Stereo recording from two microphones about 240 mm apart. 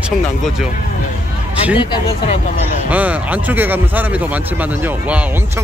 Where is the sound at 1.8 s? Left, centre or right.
Left.